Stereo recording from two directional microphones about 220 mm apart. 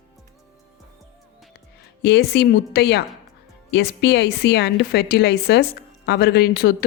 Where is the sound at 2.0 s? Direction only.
50° left (ahead or behind).